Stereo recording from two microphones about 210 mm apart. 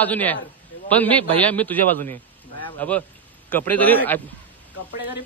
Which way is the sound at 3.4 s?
10° left (ahead or behind).